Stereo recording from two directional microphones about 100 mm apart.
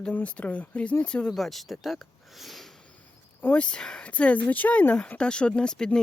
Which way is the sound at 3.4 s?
15° left (ahead or behind).